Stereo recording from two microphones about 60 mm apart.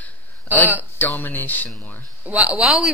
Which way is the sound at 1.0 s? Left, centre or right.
Left.